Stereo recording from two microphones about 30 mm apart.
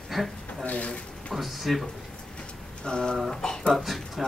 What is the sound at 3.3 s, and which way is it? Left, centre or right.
Speech, centre.